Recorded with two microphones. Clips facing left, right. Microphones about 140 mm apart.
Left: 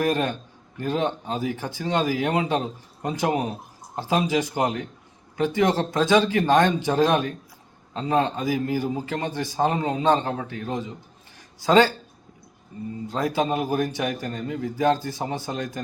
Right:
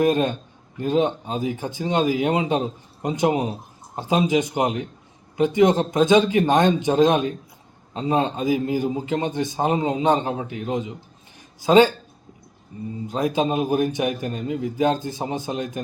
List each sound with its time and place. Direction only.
0.0 s a man's voice: 20° right (ahead or behind)
13.1 s a man's voice: 15° right (ahead or behind)